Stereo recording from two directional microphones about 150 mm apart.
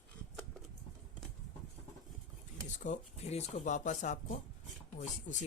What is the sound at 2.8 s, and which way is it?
Speech, 50° left (ahead or behind).